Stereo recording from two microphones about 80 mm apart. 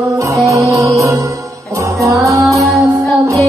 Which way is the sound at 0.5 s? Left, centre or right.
Right.